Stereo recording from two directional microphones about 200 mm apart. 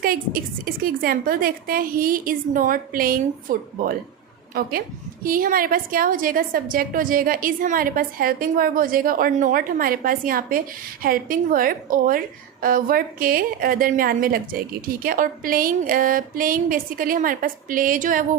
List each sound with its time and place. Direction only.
0.6 s a woman's voice: 45° right (ahead or behind)
5.2 s a woman's voice: 45° right (ahead or behind)